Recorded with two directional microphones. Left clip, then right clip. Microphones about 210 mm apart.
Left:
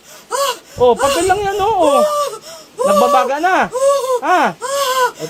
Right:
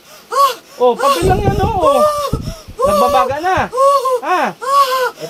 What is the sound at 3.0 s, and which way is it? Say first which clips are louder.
Speech: left 2 dB; 50° left (ahead or behind).